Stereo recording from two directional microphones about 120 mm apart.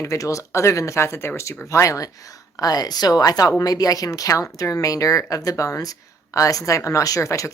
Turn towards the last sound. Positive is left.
turn(degrees=25)  # may be behind; listen again after turning